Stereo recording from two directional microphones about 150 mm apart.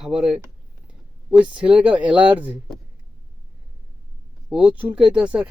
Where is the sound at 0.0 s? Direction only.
5° right (ahead or behind).